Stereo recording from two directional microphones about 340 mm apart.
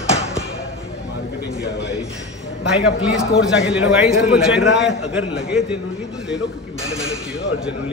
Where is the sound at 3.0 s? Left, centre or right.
Centre.